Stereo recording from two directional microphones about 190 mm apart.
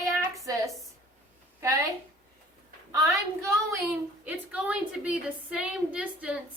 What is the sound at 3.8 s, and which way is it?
A woman's voice, 5° right (ahead or behind).